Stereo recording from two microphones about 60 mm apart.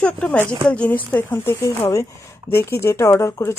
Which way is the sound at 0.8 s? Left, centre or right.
Left.